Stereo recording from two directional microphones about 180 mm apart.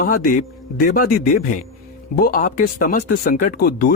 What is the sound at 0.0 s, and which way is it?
Speech, 50° left (ahead or behind).